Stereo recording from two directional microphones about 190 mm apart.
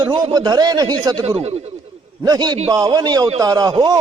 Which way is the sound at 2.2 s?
20° right (ahead or behind).